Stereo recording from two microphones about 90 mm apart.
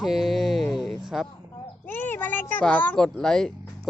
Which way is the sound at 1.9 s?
20° left (ahead or behind).